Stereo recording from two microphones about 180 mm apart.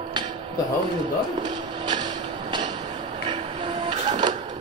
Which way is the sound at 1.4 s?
25° right (ahead or behind).